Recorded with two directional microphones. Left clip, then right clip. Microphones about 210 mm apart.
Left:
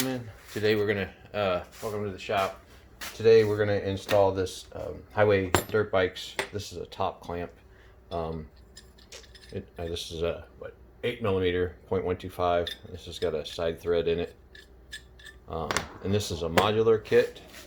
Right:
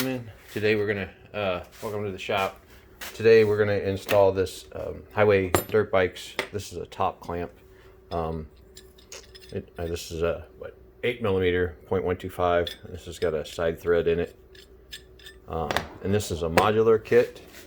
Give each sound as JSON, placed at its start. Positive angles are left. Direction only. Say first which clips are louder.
{"t": 0.1, "sound": "speech", "louder": "right 2 dB", "side_deg": -10}
{"t": 0.9, "sound": "speech", "louder": "even", "side_deg": 0}
{"t": 2.0, "sound": "speech", "louder": "right 2 dB", "side_deg": -40}
{"t": 9.0, "sound": "mechanisms", "louder": "right 3 dB", "side_deg": -25}
{"t": 9.9, "sound": "speech", "louder": "right 3 dB", "side_deg": -25}
{"t": 16.0, "sound": "speech", "louder": "right 3 dB", "side_deg": -25}